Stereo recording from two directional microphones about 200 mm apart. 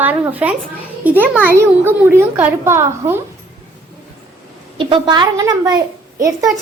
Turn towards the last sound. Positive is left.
turn(degrees=-15)  # may be behind; listen again after turning